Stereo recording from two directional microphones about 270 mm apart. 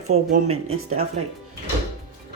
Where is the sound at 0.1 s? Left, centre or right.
Right.